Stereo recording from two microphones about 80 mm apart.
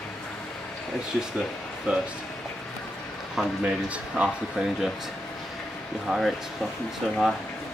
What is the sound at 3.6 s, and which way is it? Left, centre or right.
Speech, centre.